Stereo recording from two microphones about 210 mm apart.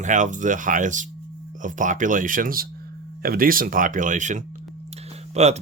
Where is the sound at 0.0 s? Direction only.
35° right (ahead or behind).